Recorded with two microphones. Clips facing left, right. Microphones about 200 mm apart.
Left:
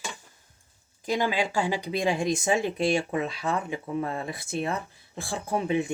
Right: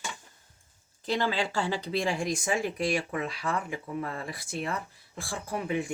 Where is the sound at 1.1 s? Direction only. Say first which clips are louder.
Left 2 dB; 15° left (ahead or behind).